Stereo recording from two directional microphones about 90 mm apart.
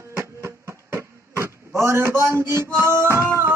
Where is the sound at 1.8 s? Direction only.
30° right (ahead or behind).